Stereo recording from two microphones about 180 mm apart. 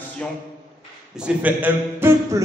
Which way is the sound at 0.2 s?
5° left (ahead or behind).